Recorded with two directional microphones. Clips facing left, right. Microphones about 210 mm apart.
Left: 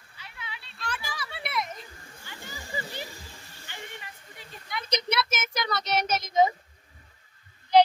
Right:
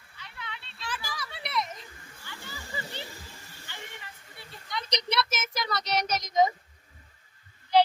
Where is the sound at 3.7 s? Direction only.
15° left (ahead or behind).